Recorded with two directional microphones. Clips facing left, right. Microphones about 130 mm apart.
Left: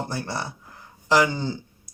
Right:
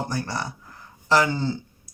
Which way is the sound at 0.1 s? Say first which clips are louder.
Right 1 dB; 25° left (ahead or behind).